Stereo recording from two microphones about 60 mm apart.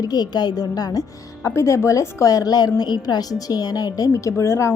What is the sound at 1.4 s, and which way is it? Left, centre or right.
A woman's voice, left.